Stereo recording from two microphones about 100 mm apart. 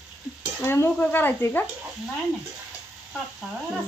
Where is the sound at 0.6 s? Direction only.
25° left (ahead or behind).